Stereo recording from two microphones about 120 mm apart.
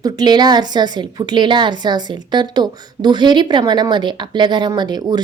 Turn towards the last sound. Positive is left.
turn(degrees=-35)  # may be behind; listen again after turning